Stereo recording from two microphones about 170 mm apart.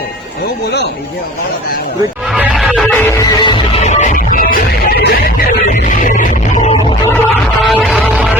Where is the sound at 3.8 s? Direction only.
40° left (ahead or behind); by 5.3 s 65° left (ahead or behind).